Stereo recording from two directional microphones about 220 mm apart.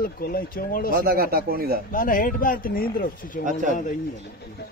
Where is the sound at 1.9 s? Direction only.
40° left (ahead or behind).